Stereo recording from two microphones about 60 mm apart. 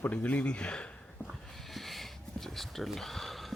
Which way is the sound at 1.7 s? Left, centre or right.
Centre.